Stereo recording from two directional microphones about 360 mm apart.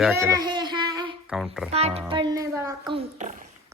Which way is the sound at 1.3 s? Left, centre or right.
Centre.